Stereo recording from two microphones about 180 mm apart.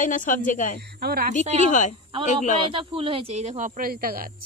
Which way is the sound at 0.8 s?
60° right (ahead or behind).